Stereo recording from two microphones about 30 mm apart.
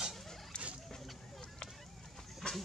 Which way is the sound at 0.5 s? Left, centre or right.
Left.